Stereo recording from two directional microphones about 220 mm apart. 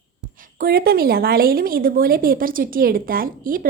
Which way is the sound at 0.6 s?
45° right (ahead or behind).